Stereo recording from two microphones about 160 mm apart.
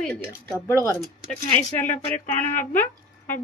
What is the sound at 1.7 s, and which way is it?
Speech, 50° left (ahead or behind).